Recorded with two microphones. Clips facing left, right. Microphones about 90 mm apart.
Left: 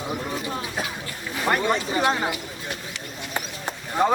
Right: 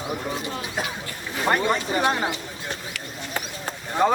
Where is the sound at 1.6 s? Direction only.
35° right (ahead or behind).